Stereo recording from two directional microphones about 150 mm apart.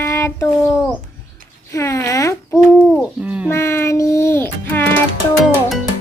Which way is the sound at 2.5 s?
5° right (ahead or behind).